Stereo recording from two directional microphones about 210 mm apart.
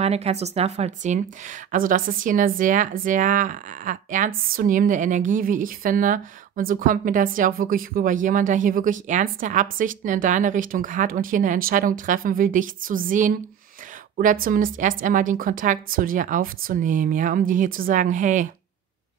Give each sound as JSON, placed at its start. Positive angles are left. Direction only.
{"t": 0.0, "sound": "a woman's voice", "side_deg": -30}